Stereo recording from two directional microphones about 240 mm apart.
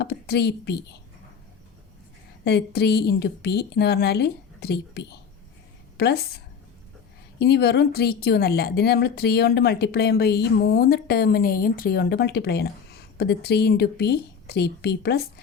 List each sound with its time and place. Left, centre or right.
0.0 s a woman's voice: left
2.4 s a woman's voice: left
7.3 s a woman's voice: left